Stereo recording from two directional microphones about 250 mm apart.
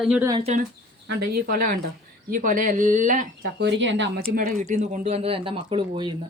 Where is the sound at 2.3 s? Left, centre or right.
Right.